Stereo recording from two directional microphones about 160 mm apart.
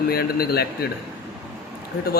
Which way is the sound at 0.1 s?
75° left (ahead or behind).